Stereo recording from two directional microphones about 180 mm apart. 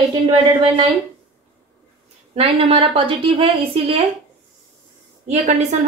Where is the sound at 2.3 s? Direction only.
30° right (ahead or behind).